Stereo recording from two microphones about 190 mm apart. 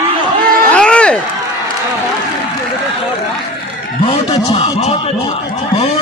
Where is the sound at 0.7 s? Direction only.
5° left (ahead or behind).